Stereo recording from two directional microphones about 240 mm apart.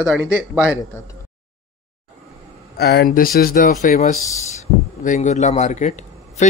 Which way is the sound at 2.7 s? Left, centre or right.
Left.